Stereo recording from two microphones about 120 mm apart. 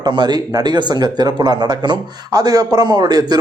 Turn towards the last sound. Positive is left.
turn(degrees=-35)  # may be behind; listen again after turning